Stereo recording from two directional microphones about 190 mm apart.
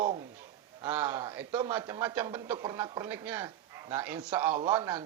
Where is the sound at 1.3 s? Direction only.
10° right (ahead or behind).